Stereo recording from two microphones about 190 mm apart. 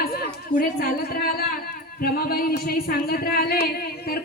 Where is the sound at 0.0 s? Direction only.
55° left (ahead or behind).